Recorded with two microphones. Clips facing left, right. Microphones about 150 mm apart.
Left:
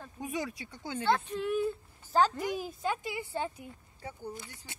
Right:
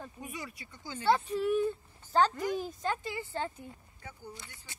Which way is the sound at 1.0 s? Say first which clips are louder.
Right 2 dB; 10° right (ahead or behind).